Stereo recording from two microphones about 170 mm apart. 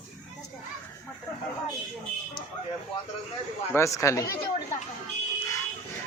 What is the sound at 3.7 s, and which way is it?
Speech, 15° left (ahead or behind).